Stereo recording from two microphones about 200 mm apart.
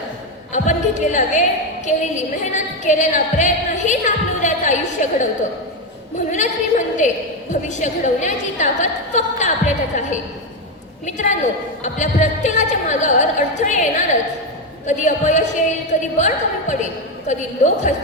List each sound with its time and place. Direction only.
0.5 s a woman's voice: 35° left (ahead or behind)
6.3 s a woman's voice: 35° left (ahead or behind)